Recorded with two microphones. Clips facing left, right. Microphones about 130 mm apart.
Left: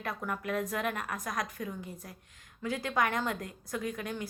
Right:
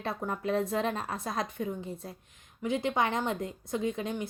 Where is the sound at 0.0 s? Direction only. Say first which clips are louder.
Right 3 dB; 30° right (ahead or behind).